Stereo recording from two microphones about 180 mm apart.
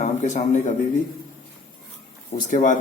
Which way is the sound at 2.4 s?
45° left (ahead or behind).